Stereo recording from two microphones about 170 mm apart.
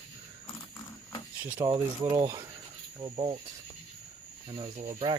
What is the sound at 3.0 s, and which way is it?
Speech, 30° right (ahead or behind).